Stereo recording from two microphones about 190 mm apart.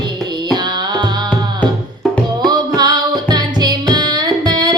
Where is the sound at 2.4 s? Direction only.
20° right (ahead or behind).